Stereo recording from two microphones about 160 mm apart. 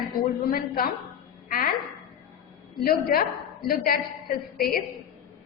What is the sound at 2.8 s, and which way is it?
A woman's voice, 70° left (ahead or behind).